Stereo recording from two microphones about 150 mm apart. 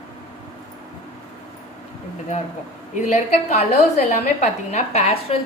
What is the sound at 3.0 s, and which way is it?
A woman's voice, 50° left (ahead or behind).